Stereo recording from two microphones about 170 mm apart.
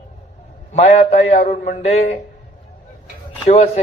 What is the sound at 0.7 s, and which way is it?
A man's voice, 40° left (ahead or behind).